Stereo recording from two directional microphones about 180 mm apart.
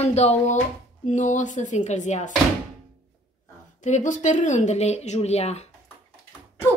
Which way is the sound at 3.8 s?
40° left (ahead or behind).